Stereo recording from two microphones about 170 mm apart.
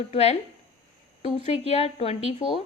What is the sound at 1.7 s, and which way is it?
Speech, 35° left (ahead or behind).